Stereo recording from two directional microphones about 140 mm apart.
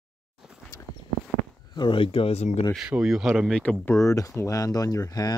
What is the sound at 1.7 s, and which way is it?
Speech, 35° left (ahead or behind).